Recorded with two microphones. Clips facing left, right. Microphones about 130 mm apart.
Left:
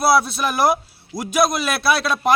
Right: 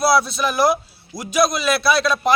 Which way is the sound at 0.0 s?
55° left (ahead or behind).